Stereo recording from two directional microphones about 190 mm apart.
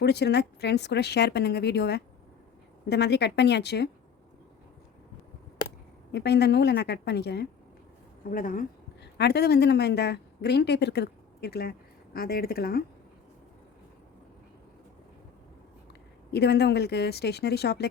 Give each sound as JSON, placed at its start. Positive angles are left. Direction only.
{"t": 0.0, "sound": "speech", "side_deg": 60}
{"t": 6.1, "sound": "speech", "side_deg": 60}
{"t": 8.3, "sound": "speech", "side_deg": 45}
{"t": 9.1, "sound": "a woman's voice", "side_deg": 60}
{"t": 16.3, "sound": "speech", "side_deg": 60}